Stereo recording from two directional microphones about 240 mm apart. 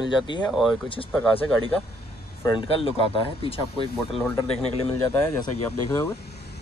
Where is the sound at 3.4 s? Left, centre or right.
Left.